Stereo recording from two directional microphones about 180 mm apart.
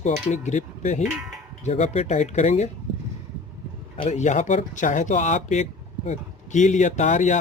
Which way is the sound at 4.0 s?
40° left (ahead or behind).